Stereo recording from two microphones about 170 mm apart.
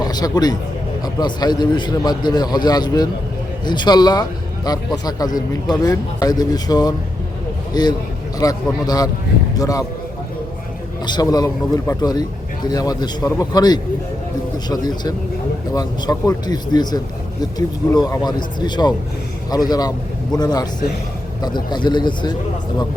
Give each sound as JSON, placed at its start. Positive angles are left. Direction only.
{"t": 0.0, "sound": "a man's voice", "side_deg": 25}
{"t": 11.0, "sound": "a man's voice", "side_deg": 25}